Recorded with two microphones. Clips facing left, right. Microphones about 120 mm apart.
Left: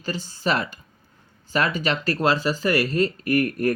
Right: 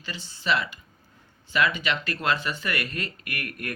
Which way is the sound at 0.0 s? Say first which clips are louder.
Left 7 dB; 40° left (ahead or behind).